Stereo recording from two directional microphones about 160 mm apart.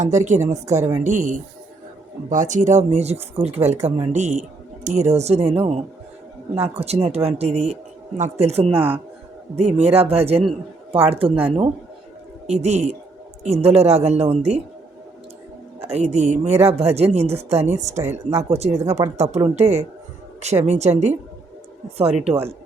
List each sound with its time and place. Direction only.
0.0 s a woman's voice: 50° right (ahead or behind)
15.8 s a woman's voice: 40° right (ahead or behind)